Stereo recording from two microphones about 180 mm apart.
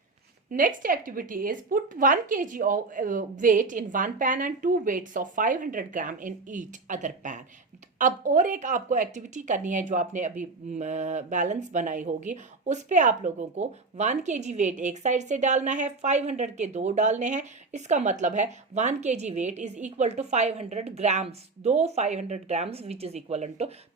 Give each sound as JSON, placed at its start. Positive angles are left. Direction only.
{"t": 0.5, "sound": "a woman's voice", "side_deg": -45}